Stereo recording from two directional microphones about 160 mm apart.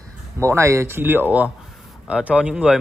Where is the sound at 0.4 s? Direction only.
15° right (ahead or behind).